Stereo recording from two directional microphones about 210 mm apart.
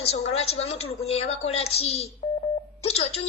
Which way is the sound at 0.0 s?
30° left (ahead or behind).